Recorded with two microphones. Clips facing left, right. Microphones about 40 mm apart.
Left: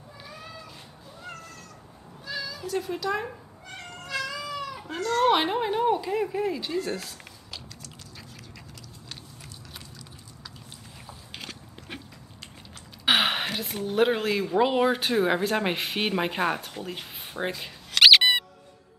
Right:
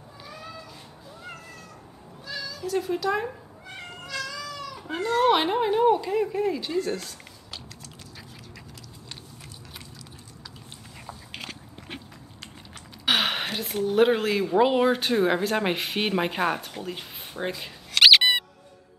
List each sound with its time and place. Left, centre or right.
2.2 s cat: centre
2.7 s speech: centre
3.7 s cat: centre
4.0 s cat: centre
4.8 s speech: centre
5.1 s speech: centre
11.1 s biting: centre
13.1 s gasp: centre
13.8 s speech: centre
16.8 s squeak: centre